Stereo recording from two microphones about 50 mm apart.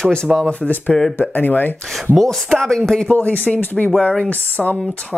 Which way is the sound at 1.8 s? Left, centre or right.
Centre.